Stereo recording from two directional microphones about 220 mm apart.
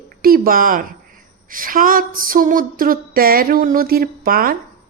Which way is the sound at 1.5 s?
40° right (ahead or behind).